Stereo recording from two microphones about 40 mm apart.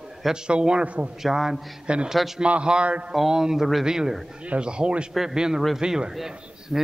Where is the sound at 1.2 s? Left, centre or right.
Centre.